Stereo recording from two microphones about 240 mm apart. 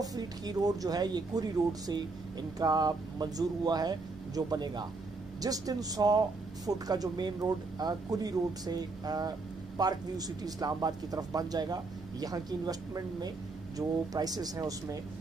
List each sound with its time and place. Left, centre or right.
0.0 s speech: centre